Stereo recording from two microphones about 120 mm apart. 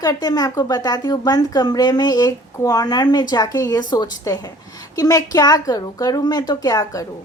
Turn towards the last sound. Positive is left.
turn(degrees=30)  # may be behind; listen again after turning